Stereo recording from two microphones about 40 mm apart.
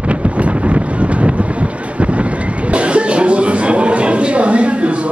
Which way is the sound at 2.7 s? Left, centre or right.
Right.